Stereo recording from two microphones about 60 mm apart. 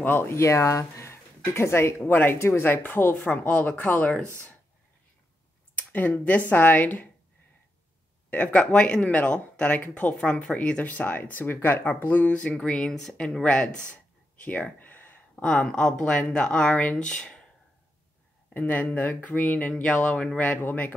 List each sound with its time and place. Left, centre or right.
0.0 s speech: left
0.4 s speech: left
2.0 s speech: left
3.3 s speech: left
5.8 s speech: left
8.3 s speech: left
10.1 s speech: centre
13.4 s speech: centre
14.4 s a sound: left
15.4 s speech: centre
18.5 s speech: left
19.7 s speech: centre